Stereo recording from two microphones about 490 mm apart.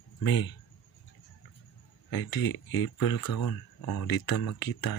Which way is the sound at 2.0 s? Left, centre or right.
Left.